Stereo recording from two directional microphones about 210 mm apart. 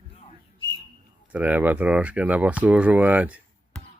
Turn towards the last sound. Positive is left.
turn(degrees=-5)  # may be behind; listen again after turning